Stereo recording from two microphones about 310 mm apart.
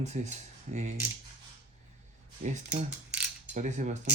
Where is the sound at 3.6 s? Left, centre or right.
Right.